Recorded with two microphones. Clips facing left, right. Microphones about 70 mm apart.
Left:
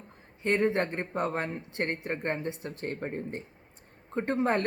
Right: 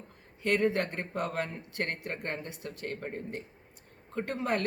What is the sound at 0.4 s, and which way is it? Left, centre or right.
Speech, left.